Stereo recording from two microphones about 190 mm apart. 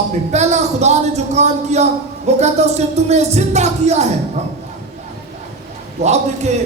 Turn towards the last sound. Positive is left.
turn(degrees=-35)  # may be behind; listen again after turning